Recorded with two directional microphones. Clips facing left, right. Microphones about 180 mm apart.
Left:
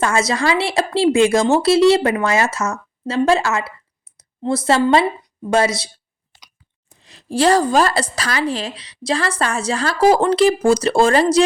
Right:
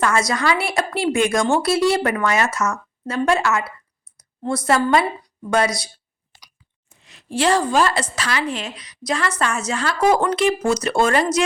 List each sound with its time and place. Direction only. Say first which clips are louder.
0.0 s a woman's voice: left 2 dB; 25° left (ahead or behind)
6.9 s a woman's voice: left 4 dB; 35° left (ahead or behind)